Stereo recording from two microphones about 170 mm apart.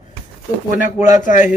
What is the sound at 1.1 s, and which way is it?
Speech, 50° left (ahead or behind).